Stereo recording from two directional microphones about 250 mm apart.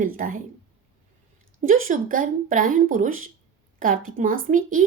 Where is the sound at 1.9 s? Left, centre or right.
Right.